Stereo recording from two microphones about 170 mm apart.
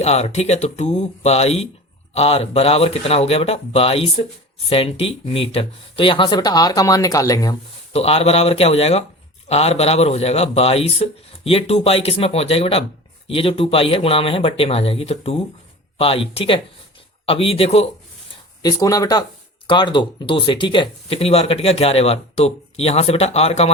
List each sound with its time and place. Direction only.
0.0 s speech: 40° left (ahead or behind); by 7.5 s 20° left (ahead or behind)
7.9 s speech: 35° left (ahead or behind)
18.6 s speech: 20° left (ahead or behind); by 23.7 s 40° left (ahead or behind)